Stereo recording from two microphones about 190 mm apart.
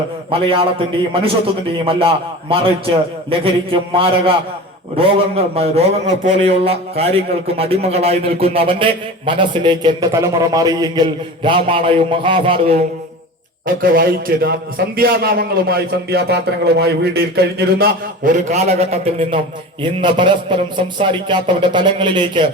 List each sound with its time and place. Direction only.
0.3 s a man's voice: 30° right (ahead or behind)
13.8 s a man's voice: 50° right (ahead or behind); by 22.4 s 25° right (ahead or behind)